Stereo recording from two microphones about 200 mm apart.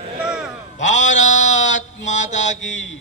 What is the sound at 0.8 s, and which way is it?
A man's voice, 35° left (ahead or behind).